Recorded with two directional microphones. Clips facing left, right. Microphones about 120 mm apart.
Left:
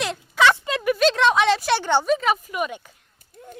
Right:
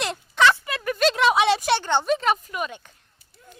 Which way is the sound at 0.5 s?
20° left (ahead or behind).